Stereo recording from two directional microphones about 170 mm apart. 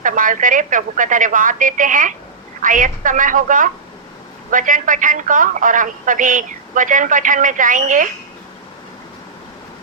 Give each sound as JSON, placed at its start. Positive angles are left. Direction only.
{"t": 0.0, "sound": "speech", "side_deg": -50}